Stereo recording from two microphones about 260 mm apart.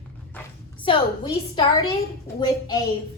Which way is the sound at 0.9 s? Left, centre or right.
Centre.